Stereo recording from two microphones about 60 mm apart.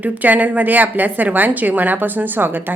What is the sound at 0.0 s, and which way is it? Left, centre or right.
A woman's voice, right.